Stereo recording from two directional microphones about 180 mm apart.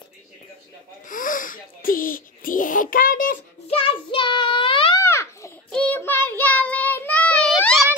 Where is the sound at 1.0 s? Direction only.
50° left (ahead or behind).